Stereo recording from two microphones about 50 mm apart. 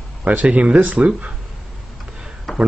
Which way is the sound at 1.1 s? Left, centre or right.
Right.